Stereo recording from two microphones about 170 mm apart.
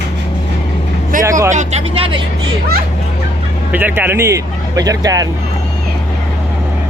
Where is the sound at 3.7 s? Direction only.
10° right (ahead or behind).